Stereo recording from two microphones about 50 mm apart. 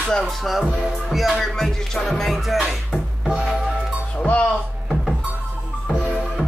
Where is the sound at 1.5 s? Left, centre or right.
Centre.